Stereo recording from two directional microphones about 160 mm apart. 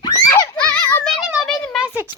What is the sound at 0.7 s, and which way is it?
Children playing, 10° left (ahead or behind).